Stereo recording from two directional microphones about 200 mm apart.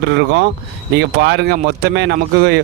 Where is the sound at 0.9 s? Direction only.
55° right (ahead or behind).